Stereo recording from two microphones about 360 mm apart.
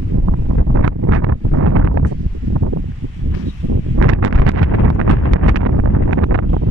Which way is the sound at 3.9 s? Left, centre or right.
Right.